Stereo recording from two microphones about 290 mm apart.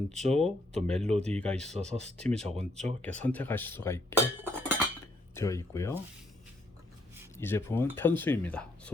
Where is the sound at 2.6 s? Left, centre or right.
Right.